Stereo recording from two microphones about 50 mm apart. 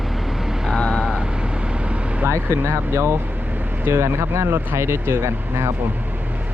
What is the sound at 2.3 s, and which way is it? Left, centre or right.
Speech, right.